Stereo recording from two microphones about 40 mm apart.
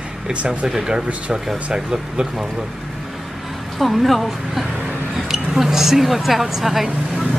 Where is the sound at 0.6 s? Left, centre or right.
Centre.